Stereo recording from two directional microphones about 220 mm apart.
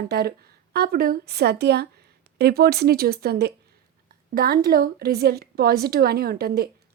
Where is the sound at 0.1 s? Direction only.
45° right (ahead or behind).